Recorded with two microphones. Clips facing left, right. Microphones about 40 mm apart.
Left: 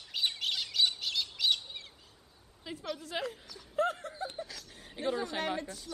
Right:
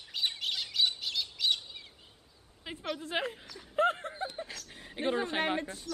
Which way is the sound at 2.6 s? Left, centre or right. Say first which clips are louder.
Even; right.